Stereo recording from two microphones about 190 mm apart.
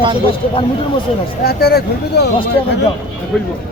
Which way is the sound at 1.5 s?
55° left (ahead or behind).